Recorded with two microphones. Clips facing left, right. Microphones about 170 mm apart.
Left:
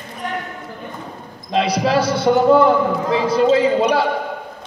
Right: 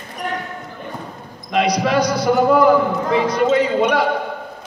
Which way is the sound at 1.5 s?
30° left (ahead or behind).